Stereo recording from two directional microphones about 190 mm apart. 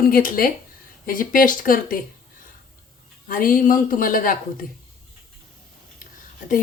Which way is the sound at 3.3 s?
45° left (ahead or behind).